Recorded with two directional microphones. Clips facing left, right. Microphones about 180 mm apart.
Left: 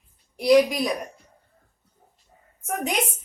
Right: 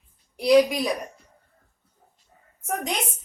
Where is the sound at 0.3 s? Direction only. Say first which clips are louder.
Even; centre (ahead or behind).